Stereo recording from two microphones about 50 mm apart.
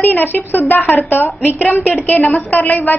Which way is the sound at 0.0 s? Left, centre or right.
Left.